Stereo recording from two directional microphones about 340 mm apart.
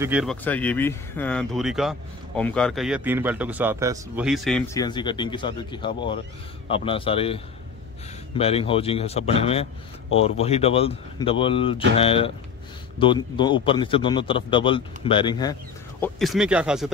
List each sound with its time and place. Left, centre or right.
0.0 s a man's voice: centre
16.0 s speech: centre